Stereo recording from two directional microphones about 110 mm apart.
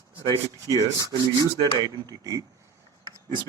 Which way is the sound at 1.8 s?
35° right (ahead or behind).